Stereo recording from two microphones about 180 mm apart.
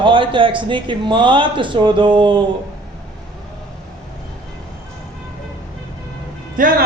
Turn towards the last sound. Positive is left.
turn(degrees=-50)  # may be behind; listen again after turning